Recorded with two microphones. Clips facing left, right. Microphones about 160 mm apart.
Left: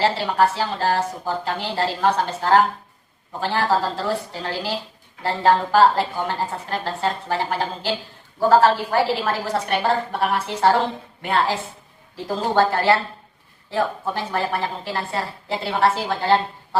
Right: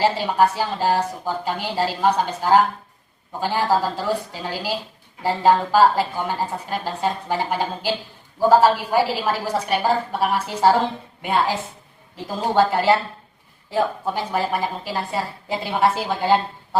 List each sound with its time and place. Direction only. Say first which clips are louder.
0.0 s a woman's voice: right 1 dB; 15° right (ahead or behind)